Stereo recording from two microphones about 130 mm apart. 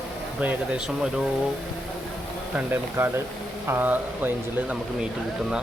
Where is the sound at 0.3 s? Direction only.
10° right (ahead or behind).